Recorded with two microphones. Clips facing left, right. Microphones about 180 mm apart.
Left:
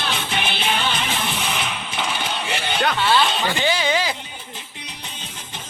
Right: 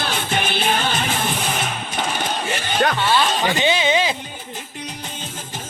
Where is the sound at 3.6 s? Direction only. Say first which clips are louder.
Right 3 dB; 20° right (ahead or behind).